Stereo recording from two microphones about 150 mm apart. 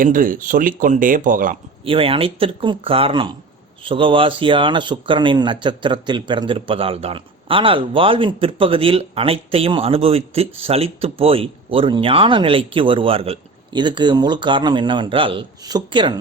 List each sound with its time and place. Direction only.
0.0 s speech: 65° right (ahead or behind)
1.8 s speech: 40° right (ahead or behind)